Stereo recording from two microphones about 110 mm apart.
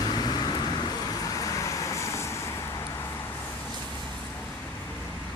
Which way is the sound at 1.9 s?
25° left (ahead or behind).